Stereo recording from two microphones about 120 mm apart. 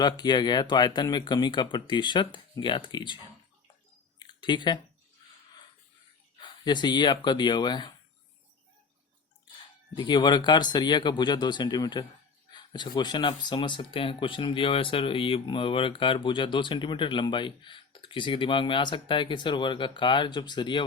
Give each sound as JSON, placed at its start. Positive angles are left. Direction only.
{"t": 0.0, "sound": "speech", "side_deg": 35}
{"t": 4.2, "sound": "a sound", "side_deg": 40}
{"t": 6.4, "sound": "speech", "side_deg": 40}
{"t": 10.0, "sound": "speech", "side_deg": 40}